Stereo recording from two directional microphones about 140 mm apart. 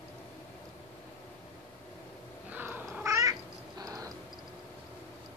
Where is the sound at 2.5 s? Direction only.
10° right (ahead or behind).